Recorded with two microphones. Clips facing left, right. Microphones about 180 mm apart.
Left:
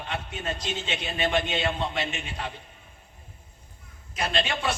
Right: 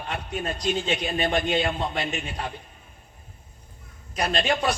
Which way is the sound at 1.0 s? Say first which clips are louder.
Right 3 dB; 40° right (ahead or behind).